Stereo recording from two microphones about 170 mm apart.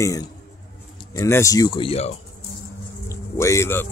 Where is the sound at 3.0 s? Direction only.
15° left (ahead or behind).